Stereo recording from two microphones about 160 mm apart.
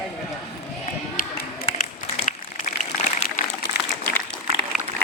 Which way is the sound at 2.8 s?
50° left (ahead or behind).